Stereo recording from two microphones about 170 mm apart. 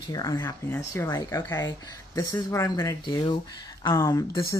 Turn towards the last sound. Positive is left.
turn(degrees=20)  # may be behind; listen again after turning